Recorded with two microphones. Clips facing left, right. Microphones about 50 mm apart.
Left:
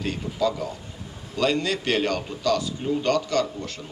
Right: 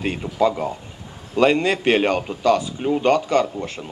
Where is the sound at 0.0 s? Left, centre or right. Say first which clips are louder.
Right 5 dB; right.